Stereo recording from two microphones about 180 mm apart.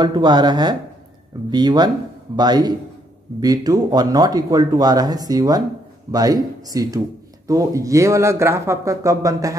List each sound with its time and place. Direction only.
0.0 s speech: 25° right (ahead or behind)